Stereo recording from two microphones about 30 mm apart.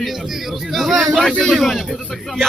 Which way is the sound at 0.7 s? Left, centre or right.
Centre.